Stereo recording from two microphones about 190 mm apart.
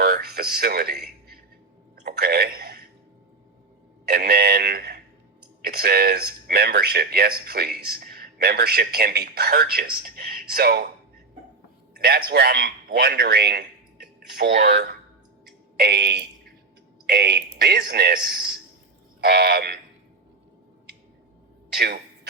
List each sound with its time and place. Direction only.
0.0 s speech: 55° right (ahead or behind)
2.1 s a man's voice: 55° right (ahead or behind)
4.1 s a man's voice: 55° right (ahead or behind)
11.9 s a man's voice: 55° right (ahead or behind)
21.8 s speech: 60° right (ahead or behind)